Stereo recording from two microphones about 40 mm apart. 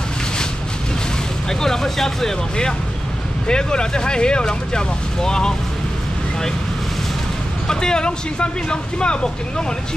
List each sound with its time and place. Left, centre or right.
1.5 s speech: centre
7.6 s speech: centre